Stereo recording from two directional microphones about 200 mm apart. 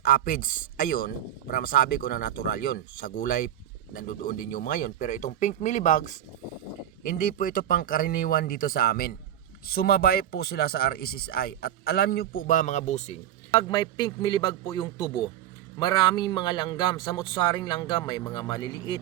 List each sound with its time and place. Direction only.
0.0 s speech: 45° left (ahead or behind)
13.7 s speech: 20° left (ahead or behind)